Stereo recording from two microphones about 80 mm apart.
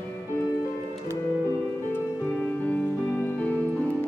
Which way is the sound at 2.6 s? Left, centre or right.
Centre.